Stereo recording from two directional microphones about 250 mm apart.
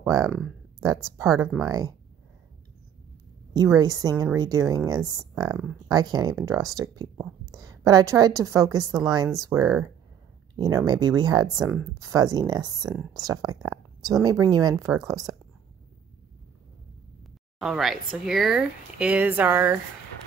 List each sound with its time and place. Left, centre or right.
0.0 s speech: centre
3.5 s a woman's voice: centre
11.6 s speech: centre
11.9 s speech: centre
17.6 s speech: centre